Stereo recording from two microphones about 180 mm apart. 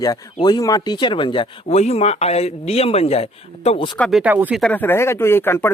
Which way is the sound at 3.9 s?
5° left (ahead or behind).